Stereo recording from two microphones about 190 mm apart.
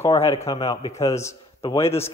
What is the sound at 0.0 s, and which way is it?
A man's voice, 15° left (ahead or behind).